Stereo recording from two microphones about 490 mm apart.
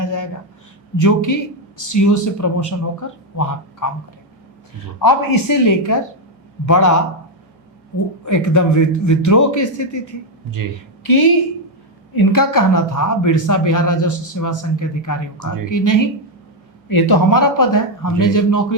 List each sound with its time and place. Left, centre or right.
0.0 s a sound: left
0.9 s speech: left
4.9 s speech: left
8.2 s speech: left
11.0 s a woman's voice: left